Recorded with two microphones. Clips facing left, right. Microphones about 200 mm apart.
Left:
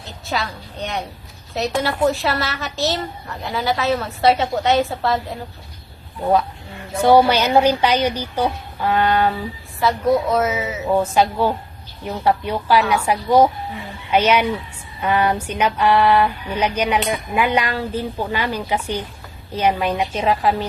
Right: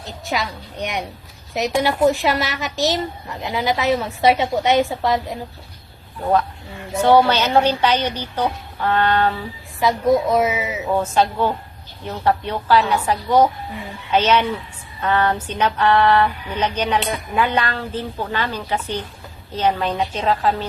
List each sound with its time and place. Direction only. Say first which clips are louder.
0.0 s a woman's voice: right 1 dB; 15° right (ahead or behind)
7.0 s speech: left 1 dB; 10° left (ahead or behind)
9.8 s a woman's voice: right 1 dB; 15° right (ahead or behind)
11.1 s speech: left 1 dB; 10° left (ahead or behind)